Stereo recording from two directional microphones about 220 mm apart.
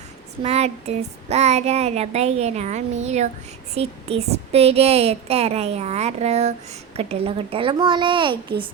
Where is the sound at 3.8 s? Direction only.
30° right (ahead or behind).